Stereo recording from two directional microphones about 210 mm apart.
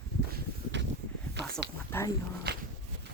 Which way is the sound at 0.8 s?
55° right (ahead or behind).